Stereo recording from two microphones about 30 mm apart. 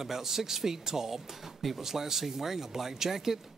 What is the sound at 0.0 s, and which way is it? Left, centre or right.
Speech, centre.